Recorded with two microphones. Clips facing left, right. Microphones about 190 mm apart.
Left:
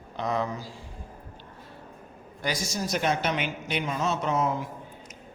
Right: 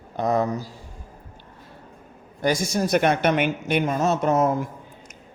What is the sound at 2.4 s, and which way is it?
A man's voice, 55° right (ahead or behind).